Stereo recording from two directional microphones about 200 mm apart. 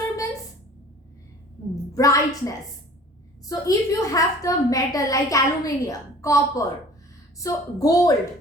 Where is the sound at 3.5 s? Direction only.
15° left (ahead or behind).